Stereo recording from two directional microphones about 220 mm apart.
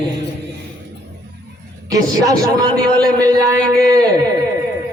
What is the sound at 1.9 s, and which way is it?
A man's voice, 15° right (ahead or behind).